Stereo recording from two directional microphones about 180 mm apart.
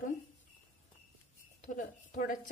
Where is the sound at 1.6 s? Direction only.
45° left (ahead or behind).